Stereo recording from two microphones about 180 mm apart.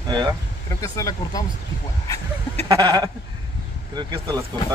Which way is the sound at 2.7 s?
20° right (ahead or behind).